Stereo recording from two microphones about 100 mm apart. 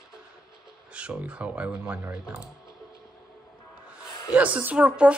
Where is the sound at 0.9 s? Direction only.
10° right (ahead or behind).